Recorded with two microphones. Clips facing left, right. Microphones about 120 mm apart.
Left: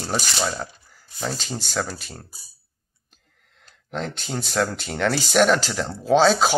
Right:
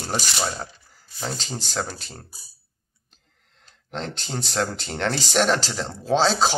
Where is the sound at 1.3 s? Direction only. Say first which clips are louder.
Left 1 dB; 35° right (ahead or behind).